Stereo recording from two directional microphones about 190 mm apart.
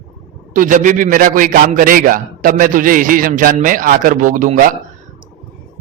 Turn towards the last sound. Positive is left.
turn(degrees=-45)  # may be behind; listen again after turning